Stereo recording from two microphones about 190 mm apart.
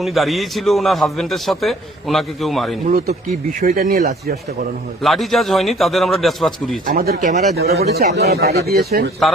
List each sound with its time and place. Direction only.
0.0 s a man's voice: centre (ahead or behind)
2.8 s speech: 40° right (ahead or behind)
5.0 s a man's voice: centre (ahead or behind)
6.8 s speech: 50° right (ahead or behind)
7.9 s speech: 55° right (ahead or behind)